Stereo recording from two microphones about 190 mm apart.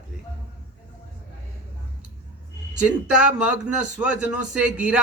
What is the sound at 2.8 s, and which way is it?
Speech, 5° right (ahead or behind).